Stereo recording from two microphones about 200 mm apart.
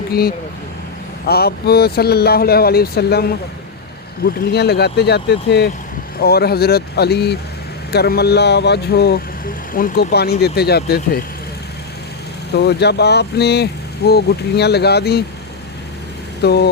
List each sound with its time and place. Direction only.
0.1 s speech: 50° left (ahead or behind)
4.5 s speech: 55° left (ahead or behind)
12.5 s speech: 55° left (ahead or behind)
16.4 s speech: 55° left (ahead or behind)